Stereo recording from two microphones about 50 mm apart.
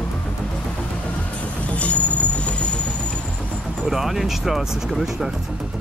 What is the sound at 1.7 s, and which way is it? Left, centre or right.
Vehicle, left.